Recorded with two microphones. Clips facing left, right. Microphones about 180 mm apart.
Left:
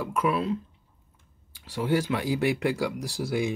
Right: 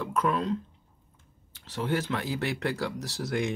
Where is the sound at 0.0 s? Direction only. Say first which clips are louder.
Left 1 dB; 10° left (ahead or behind).